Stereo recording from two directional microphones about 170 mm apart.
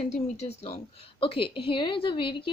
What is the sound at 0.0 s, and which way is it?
A woman's voice, 40° left (ahead or behind).